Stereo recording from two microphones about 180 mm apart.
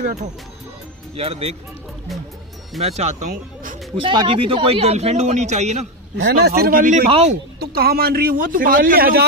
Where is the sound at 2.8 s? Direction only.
40° right (ahead or behind).